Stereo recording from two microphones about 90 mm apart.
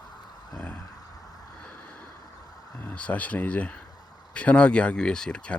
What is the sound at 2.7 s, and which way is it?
Speech, 15° left (ahead or behind).